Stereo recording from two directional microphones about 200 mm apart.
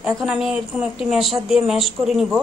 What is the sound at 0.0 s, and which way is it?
A woman's voice, centre (ahead or behind).